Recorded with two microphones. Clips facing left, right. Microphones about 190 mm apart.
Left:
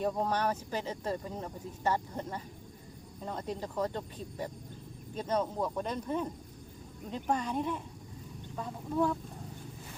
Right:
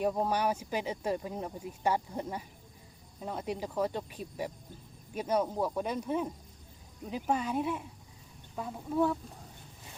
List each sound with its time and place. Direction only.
0.0 s speech: 10° right (ahead or behind)